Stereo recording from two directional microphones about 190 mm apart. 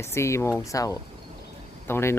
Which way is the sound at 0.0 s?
15° left (ahead or behind).